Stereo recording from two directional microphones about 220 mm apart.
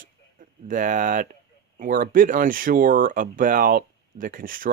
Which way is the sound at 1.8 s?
40° right (ahead or behind).